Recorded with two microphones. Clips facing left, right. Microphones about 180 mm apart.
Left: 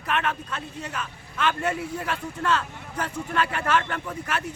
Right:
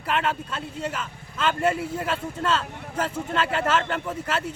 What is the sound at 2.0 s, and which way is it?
Speech, 25° right (ahead or behind).